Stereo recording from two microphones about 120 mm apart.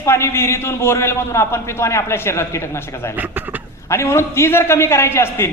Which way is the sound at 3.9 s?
20° left (ahead or behind).